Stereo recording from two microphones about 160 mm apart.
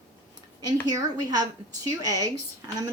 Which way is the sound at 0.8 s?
25° right (ahead or behind).